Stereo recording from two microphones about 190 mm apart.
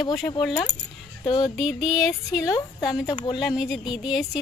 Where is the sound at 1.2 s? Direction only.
20° left (ahead or behind).